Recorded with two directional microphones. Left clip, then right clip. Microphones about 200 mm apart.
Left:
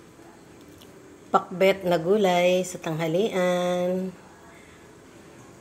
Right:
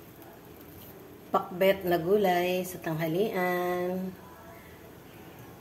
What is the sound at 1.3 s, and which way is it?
A woman's voice, 30° left (ahead or behind).